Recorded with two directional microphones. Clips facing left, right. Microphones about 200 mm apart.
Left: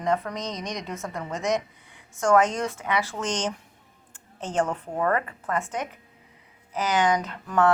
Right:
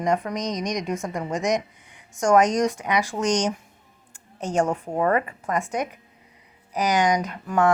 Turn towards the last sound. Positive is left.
turn(degrees=-10)  # may be behind; listen again after turning